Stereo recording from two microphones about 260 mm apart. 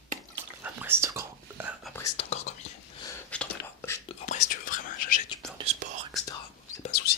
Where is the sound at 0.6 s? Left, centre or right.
Centre.